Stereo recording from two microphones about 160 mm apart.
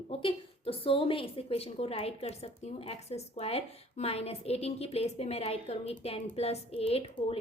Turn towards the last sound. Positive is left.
turn(degrees=40)  # may be behind; listen again after turning